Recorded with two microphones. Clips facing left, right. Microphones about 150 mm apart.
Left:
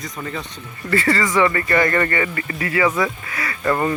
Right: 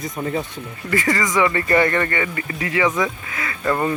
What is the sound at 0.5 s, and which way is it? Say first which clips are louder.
Speech: left 1 dB; 15° right (ahead or behind).